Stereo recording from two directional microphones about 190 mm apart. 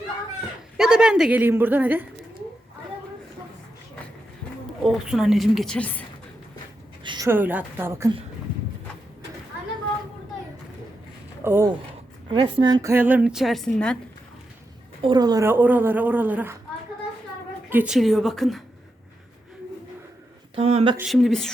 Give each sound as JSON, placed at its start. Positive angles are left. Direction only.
{"t": 0.8, "sound": "a woman's voice", "side_deg": -5}
{"t": 4.8, "sound": "a woman's voice", "side_deg": 0}
{"t": 7.0, "sound": "a sound", "side_deg": -25}
{"t": 7.3, "sound": "a woman's voice", "side_deg": -10}
{"t": 11.4, "sound": "a woman's voice", "side_deg": -10}
{"t": 12.3, "sound": "a woman's voice", "side_deg": -25}
{"t": 15.0, "sound": "a woman's voice", "side_deg": -20}
{"t": 17.7, "sound": "a woman's voice", "side_deg": -5}
{"t": 20.6, "sound": "speech", "side_deg": -30}
{"t": 21.0, "sound": "a woman's voice", "side_deg": 0}